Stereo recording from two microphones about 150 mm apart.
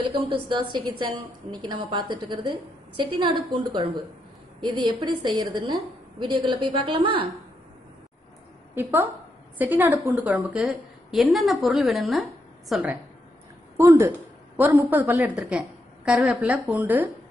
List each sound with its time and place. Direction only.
0.3 s a woman's voice: 30° right (ahead or behind)
9.6 s a woman's voice: 10° right (ahead or behind)
13.7 s a woman's voice: 20° right (ahead or behind)